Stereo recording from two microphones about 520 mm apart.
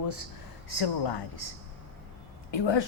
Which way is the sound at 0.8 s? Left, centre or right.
Left.